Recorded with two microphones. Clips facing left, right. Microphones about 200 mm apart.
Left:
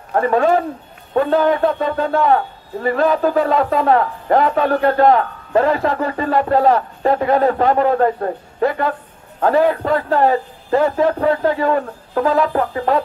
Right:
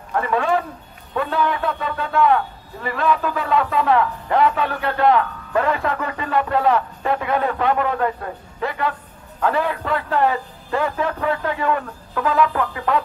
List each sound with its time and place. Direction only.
0.1 s a man's voice: 40° left (ahead or behind)